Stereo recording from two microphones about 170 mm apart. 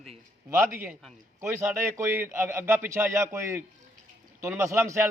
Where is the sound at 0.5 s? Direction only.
15° right (ahead or behind).